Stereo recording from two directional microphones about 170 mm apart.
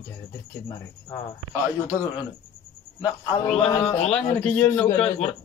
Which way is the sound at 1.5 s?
10° right (ahead or behind).